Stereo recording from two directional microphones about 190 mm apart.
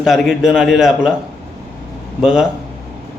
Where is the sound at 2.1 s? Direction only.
5° right (ahead or behind).